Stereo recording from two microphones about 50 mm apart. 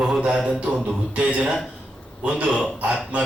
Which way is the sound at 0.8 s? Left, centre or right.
Centre.